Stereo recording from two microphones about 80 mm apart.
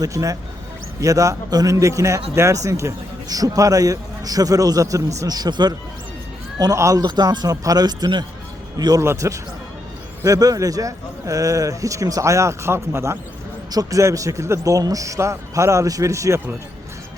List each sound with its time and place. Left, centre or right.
0.0 s a man's voice: right
6.7 s a man's voice: right
7.0 s speech: right
9.0 s a man's voice: right
10.2 s a man's voice: right
13.7 s a man's voice: right
14.0 s a man's voice: right